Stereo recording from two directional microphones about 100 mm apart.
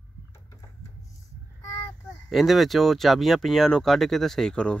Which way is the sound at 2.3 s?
Centre (ahead or behind).